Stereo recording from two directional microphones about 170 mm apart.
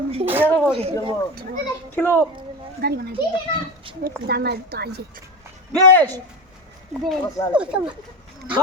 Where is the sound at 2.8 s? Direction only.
65° right (ahead or behind).